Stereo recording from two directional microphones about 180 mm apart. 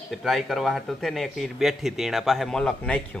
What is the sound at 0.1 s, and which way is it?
Speech, centre (ahead or behind).